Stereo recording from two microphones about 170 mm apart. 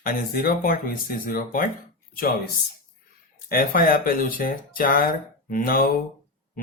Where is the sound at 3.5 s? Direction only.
60° left (ahead or behind).